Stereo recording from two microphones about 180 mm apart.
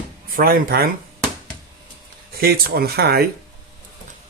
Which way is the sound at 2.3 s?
60° right (ahead or behind).